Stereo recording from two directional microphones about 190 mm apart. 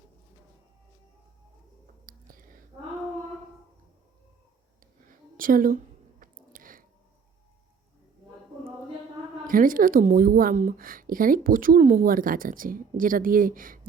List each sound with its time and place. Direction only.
2.0 s whispering: 45° right (ahead or behind)
5.4 s a sound: 45° right (ahead or behind)
9.5 s a woman's voice: 45° right (ahead or behind)